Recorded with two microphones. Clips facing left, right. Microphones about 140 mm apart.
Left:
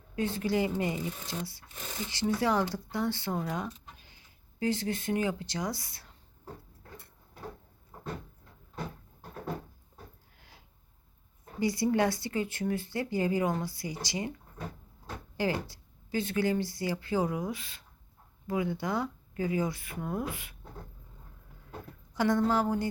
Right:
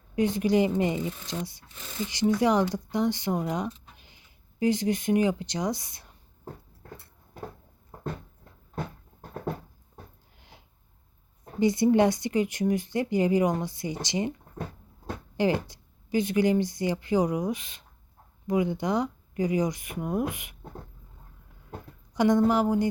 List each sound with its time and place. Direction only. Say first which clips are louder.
0.2 s speech: right 6 dB; 15° right (ahead or behind)
11.6 s speech: right 6 dB; 20° right (ahead or behind)
15.4 s speech: right 6 dB; 20° right (ahead or behind)
22.1 s speech: right 5 dB; 15° right (ahead or behind)